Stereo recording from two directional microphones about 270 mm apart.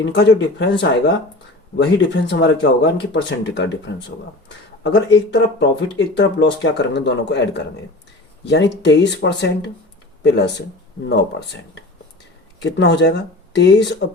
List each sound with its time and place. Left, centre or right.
0.0 s speech: left